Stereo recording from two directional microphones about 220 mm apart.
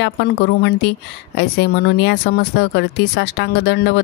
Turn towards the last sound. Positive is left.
turn(degrees=50)  # may be behind; listen again after turning